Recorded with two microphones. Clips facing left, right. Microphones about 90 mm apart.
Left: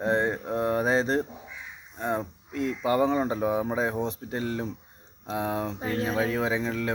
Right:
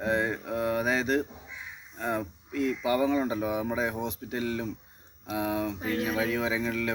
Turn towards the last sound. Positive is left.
turn(degrees=30)  # may be behind; listen again after turning